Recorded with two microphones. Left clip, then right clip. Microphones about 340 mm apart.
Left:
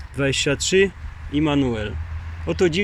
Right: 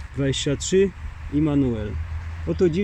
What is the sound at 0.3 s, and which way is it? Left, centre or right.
Speech, left.